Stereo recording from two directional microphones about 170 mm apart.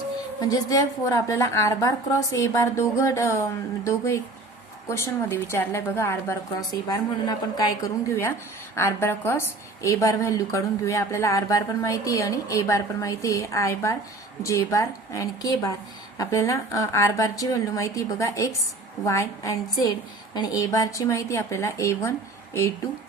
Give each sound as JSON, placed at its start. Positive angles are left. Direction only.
{"t": 0.3, "sound": "a woman's voice", "side_deg": 20}